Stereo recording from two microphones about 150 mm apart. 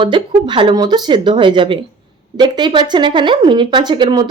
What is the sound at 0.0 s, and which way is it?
Speech, 35° right (ahead or behind).